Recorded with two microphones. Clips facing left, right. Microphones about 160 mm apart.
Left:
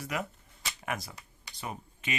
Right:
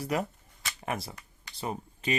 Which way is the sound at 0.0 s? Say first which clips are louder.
Right 5 dB; 35° right (ahead or behind).